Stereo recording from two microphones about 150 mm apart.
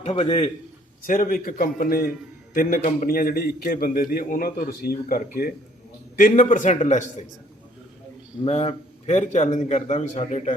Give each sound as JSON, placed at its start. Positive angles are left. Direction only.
{"t": 0.0, "sound": "a man's voice", "side_deg": 45}
{"t": 1.0, "sound": "a man's voice", "side_deg": 65}
{"t": 8.4, "sound": "a man's voice", "side_deg": 45}